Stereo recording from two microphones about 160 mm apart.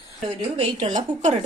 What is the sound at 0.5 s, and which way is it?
Speech, 45° right (ahead or behind).